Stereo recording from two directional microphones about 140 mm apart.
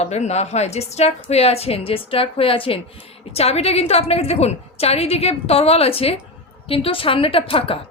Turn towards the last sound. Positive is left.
turn(degrees=40)  # may be behind; listen again after turning